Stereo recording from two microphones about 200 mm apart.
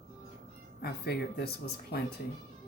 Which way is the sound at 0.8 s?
50° left (ahead or behind).